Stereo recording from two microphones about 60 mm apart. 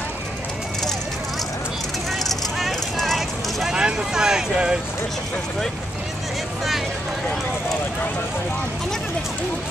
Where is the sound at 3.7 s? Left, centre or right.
Centre.